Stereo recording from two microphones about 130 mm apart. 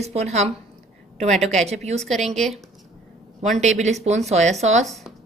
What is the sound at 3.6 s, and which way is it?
A woman's voice, 60° right (ahead or behind).